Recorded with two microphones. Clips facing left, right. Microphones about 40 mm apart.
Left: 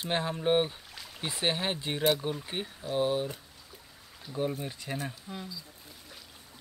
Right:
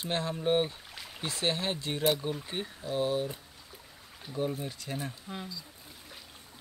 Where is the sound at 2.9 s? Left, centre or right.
Centre.